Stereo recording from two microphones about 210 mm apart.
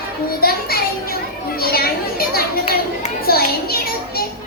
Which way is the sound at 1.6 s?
45° left (ahead or behind).